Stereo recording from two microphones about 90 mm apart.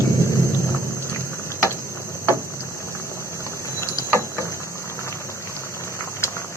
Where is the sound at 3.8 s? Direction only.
35° left (ahead or behind).